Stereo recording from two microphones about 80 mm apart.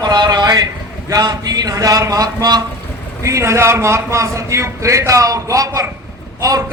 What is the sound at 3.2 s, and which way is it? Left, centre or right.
A man's voice, right.